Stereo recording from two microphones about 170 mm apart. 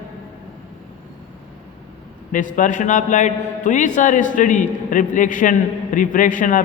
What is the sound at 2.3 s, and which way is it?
A man's voice, 50° left (ahead or behind).